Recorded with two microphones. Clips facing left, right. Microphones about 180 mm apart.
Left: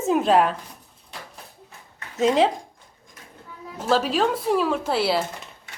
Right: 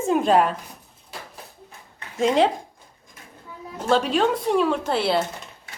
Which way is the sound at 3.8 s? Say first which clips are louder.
Right 1 dB; centre (ahead or behind).